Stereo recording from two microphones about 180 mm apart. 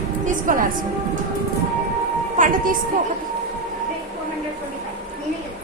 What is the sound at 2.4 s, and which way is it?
Speech, 50° right (ahead or behind).